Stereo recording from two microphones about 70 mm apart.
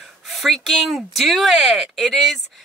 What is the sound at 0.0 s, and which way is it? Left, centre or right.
Speech, centre.